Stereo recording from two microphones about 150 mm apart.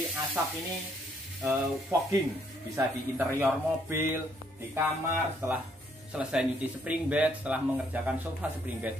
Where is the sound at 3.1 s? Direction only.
15° right (ahead or behind).